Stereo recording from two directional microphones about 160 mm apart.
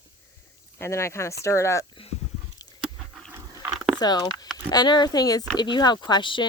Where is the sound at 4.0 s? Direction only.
25° left (ahead or behind).